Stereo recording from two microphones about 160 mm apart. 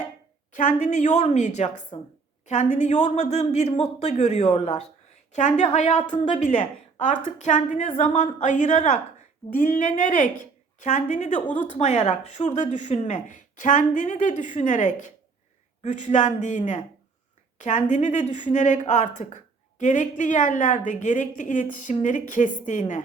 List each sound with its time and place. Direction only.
0.5 s speech: 50° left (ahead or behind)
1.9 s a woman's voice: 35° left (ahead or behind)
2.5 s speech: 45° left (ahead or behind)
7.0 s speech: 50° left (ahead or behind)